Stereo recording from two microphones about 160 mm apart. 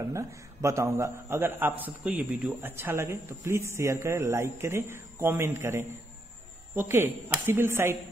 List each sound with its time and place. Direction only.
0.0 s a man's voice: 20° right (ahead or behind)